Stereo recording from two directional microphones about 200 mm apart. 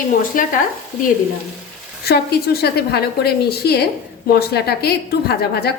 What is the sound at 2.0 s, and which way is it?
A woman's voice, 55° left (ahead or behind).